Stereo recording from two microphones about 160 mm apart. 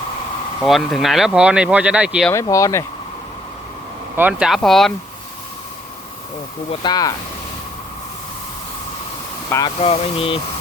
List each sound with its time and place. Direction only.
0.6 s speech: centre (ahead or behind)
2.3 s speech: 20° left (ahead or behind)
4.2 s speech: 5° right (ahead or behind)
6.7 s speech: 25° left (ahead or behind)
9.5 s speech: 25° left (ahead or behind)
9.8 s speech: 35° left (ahead or behind)